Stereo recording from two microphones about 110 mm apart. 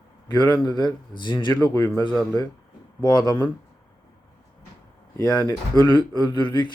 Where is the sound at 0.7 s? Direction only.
40° left (ahead or behind).